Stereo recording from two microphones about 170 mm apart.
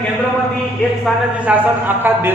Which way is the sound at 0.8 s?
5° left (ahead or behind).